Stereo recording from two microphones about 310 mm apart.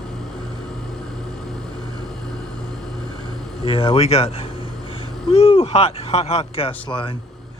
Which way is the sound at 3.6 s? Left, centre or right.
Centre.